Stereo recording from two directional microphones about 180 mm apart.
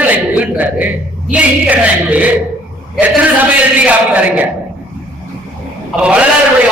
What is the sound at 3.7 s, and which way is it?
Speech, 10° right (ahead or behind).